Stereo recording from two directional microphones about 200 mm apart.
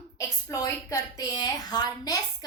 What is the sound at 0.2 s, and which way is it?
A woman's voice, 15° left (ahead or behind).